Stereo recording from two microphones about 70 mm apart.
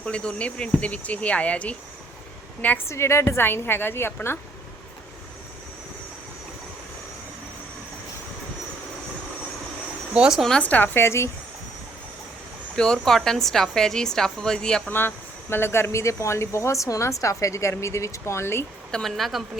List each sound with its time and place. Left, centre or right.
0.0 s a woman's voice: centre
2.8 s a woman's voice: left
10.2 s speech: centre
10.6 s a woman's voice: left
10.9 s a woman's voice: left
12.7 s a woman's voice: centre
14.8 s speech: left
18.9 s speech: centre